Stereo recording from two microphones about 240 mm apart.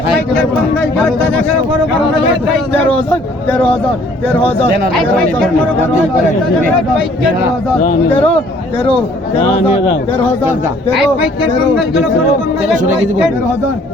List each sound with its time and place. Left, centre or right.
0.8 s speech: centre
3.1 s speech: centre
7.8 s speech: left